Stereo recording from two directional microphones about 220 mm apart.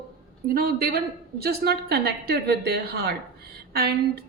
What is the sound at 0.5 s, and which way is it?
A woman's voice, 45° right (ahead or behind).